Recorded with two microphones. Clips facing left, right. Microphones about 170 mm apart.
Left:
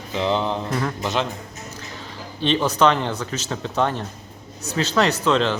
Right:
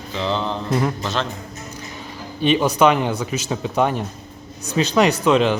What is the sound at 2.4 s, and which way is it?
Speech, 10° right (ahead or behind).